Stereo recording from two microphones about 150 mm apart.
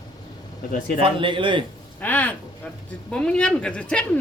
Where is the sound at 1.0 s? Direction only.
35° right (ahead or behind).